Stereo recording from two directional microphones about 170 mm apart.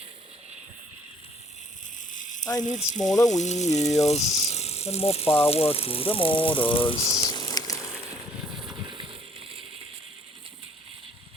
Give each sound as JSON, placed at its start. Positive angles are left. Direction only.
{"t": 2.4, "sound": "speech", "side_deg": 20}
{"t": 2.6, "sound": "speech", "side_deg": 45}
{"t": 7.2, "sound": "a sound", "side_deg": 25}
{"t": 8.8, "sound": "vehicle", "side_deg": -30}